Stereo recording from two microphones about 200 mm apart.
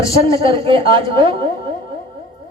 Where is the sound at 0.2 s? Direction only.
25° right (ahead or behind).